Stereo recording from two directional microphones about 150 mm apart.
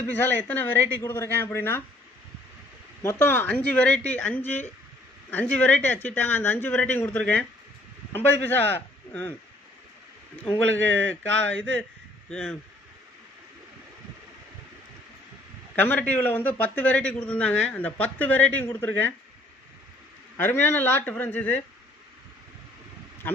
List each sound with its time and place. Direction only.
0.0 s a man's voice: 10° left (ahead or behind)
3.0 s a man's voice: 15° left (ahead or behind)
10.8 s a man's voice: 10° left (ahead or behind)
15.7 s a man's voice: 10° left (ahead or behind)
20.3 s a man's voice: 15° left (ahead or behind)